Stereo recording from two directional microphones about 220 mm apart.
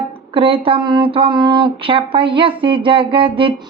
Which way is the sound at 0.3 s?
25° right (ahead or behind).